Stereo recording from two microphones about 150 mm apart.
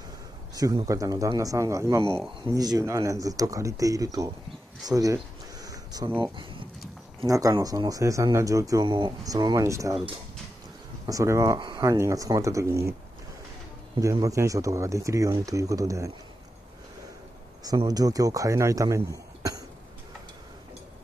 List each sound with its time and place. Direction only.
0.6 s speech: 25° right (ahead or behind)
4.8 s a sound: 25° right (ahead or behind)
7.2 s speech: 20° right (ahead or behind)
11.1 s speech: 20° right (ahead or behind)
13.9 s speech: 20° right (ahead or behind)
17.6 s speech: 25° right (ahead or behind)